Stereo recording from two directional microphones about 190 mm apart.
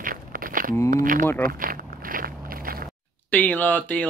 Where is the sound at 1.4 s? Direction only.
50° right (ahead or behind).